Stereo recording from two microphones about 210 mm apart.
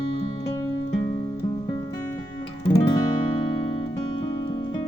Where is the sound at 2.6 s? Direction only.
20° left (ahead or behind).